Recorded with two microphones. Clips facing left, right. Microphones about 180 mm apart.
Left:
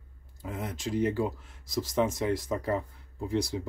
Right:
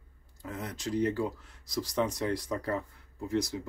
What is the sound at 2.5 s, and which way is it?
Speech, 10° left (ahead or behind).